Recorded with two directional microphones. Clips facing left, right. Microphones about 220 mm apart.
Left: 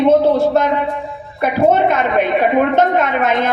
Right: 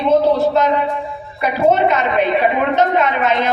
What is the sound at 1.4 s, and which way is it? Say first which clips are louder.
A woman's voice: left 1 dB; 50° left (ahead or behind).